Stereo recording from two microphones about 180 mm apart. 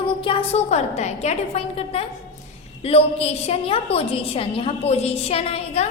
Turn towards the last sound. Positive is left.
turn(degrees=35)  # may be behind; listen again after turning